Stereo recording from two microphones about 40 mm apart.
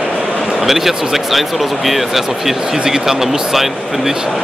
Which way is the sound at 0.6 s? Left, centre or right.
Centre.